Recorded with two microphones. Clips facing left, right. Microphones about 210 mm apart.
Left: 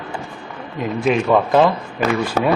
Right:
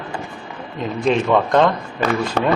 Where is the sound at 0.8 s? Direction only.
5° left (ahead or behind).